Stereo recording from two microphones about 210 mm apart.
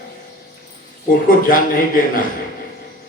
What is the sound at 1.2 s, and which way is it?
Speech, 40° left (ahead or behind).